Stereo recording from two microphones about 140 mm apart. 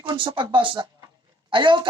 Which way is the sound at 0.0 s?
35° right (ahead or behind).